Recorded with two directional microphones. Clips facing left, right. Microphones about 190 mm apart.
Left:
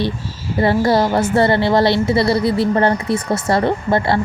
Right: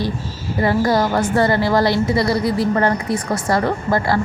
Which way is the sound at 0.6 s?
30° left (ahead or behind).